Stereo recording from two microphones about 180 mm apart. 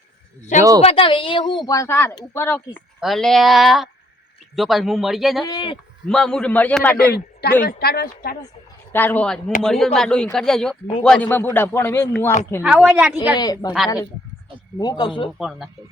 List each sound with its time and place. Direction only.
0.8 s speech: 30° left (ahead or behind); by 2.8 s 10° left (ahead or behind)
3.0 s a man's voice: centre (ahead or behind)
5.5 s speech: 25° left (ahead or behind)
5.7 s a man's voice: 5° left (ahead or behind)
7.0 s speech: 60° left (ahead or behind)
8.9 s a man's voice: 10° left (ahead or behind)
12.6 s speech: 5° right (ahead or behind)
13.4 s speech: 20° left (ahead or behind)
14.8 s speech: 25° left (ahead or behind)
15.4 s a man's voice: centre (ahead or behind)